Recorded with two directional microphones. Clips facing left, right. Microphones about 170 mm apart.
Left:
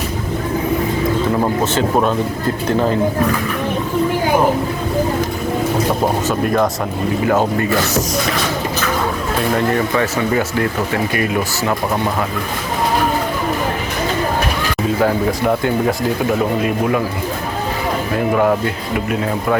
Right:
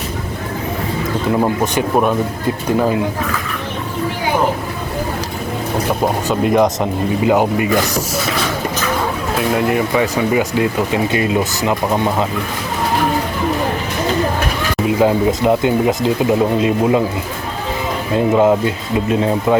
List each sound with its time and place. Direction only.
1.4 s speech: 10° right (ahead or behind)
6.2 s speech: 20° right (ahead or behind)
9.6 s speech: 10° right (ahead or behind)
14.8 s speech: 20° right (ahead or behind)
18.1 s speech: 20° right (ahead or behind)